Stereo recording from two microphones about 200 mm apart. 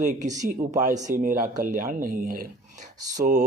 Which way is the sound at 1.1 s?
40° right (ahead or behind).